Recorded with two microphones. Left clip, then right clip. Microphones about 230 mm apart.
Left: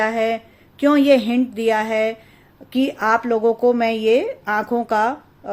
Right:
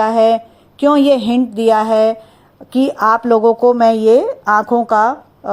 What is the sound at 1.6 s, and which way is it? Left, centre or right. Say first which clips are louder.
A woman's voice: right 8 dB; centre.